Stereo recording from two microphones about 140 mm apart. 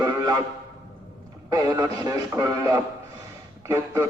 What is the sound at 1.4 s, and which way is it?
Music, 25° right (ahead or behind).